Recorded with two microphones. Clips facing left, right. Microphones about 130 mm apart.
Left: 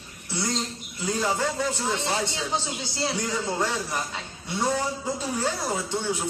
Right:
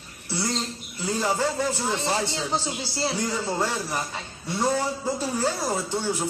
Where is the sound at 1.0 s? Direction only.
10° right (ahead or behind).